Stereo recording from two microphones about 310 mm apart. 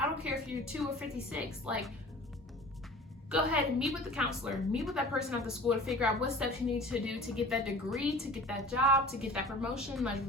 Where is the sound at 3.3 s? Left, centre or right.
Centre.